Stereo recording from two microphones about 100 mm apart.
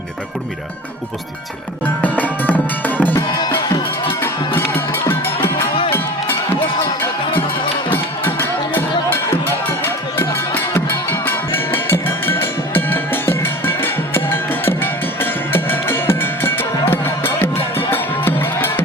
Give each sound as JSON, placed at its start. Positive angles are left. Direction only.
{"t": 2.0, "sound": "music", "side_deg": 15}
{"t": 4.2, "sound": "music", "side_deg": 20}
{"t": 7.9, "sound": "music", "side_deg": 20}